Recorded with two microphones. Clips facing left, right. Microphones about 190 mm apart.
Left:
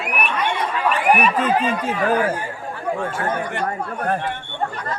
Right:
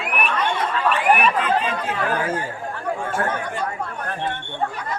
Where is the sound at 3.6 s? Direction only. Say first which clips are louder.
Left 4 dB; 40° left (ahead or behind).